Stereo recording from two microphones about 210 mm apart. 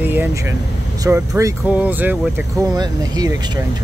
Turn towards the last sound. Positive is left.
turn(degrees=-20)  # may be behind; listen again after turning